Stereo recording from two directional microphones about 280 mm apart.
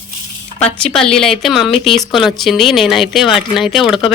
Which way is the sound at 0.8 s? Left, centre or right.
Centre.